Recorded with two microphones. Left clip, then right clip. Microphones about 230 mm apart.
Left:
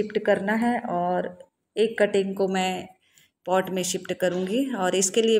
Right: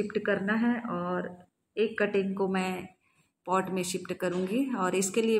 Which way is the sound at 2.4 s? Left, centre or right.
Centre.